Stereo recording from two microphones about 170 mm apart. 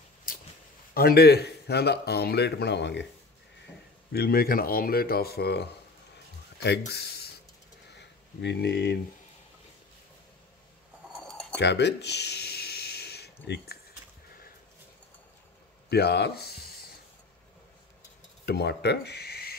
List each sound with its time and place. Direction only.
0.9 s speech: 65° left (ahead or behind); by 3.1 s 90° left
4.1 s speech: 65° left (ahead or behind)
7.9 s a sound: 90° left; by 8.9 s 70° left (ahead or behind)
11.5 s a sound: 90° left; by 13.7 s 75° left (ahead or behind)
15.9 s speech: 75° left (ahead or behind)
18.4 s speech: 75° left (ahead or behind)